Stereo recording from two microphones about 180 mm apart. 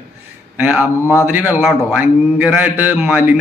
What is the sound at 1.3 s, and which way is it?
A man's voice, 10° right (ahead or behind).